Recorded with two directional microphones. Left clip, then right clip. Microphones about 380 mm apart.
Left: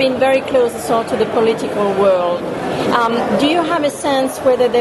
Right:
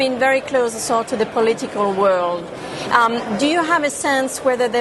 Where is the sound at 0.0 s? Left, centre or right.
Right.